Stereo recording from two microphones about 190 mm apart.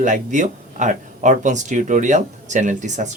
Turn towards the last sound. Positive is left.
turn(degrees=-40)  # may be behind; listen again after turning